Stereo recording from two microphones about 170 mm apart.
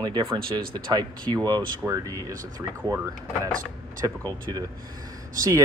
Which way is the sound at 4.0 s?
20° right (ahead or behind).